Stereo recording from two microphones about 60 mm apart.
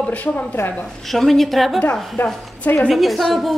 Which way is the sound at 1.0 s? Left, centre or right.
Centre.